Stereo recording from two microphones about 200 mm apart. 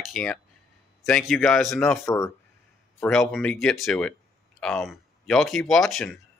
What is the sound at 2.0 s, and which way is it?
Speech, 15° left (ahead or behind).